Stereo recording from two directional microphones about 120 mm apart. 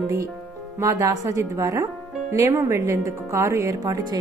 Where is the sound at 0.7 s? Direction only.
25° right (ahead or behind).